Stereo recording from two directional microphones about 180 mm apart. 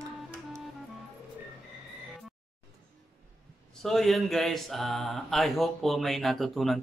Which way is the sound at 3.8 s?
Centre (ahead or behind).